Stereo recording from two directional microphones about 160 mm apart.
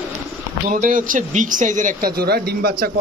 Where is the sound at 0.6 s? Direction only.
55° right (ahead or behind); by 2.9 s 70° right (ahead or behind).